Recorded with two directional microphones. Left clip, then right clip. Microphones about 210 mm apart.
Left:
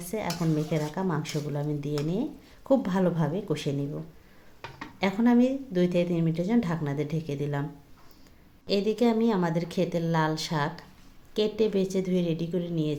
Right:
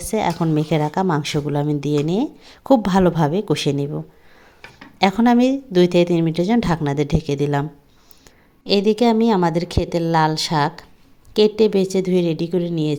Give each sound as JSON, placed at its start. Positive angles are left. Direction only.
{"t": 0.0, "sound": "a woman's voice", "side_deg": -45}
{"t": 8.6, "sound": "a woman's voice", "side_deg": -40}